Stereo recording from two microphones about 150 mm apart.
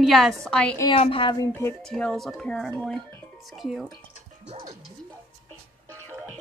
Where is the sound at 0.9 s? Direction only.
35° left (ahead or behind).